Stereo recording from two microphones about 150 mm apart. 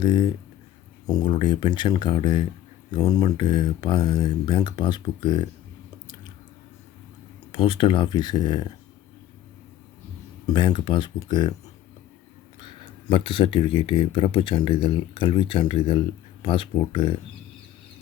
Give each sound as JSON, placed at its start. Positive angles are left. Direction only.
{"t": 0.0, "sound": "speech", "side_deg": 30}
{"t": 7.5, "sound": "speech", "side_deg": 35}
{"t": 10.4, "sound": "speech", "side_deg": 30}
{"t": 12.5, "sound": "speech", "side_deg": 30}